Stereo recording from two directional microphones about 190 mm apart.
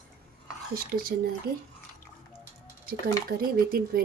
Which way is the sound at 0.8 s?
50° right (ahead or behind).